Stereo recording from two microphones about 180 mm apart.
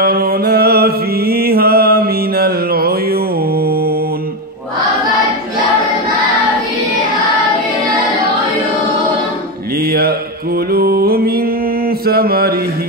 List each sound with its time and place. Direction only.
0.0 s mantra: 60° right (ahead or behind)
10.7 s music: 60° right (ahead or behind)
12.1 s mantra: 55° right (ahead or behind)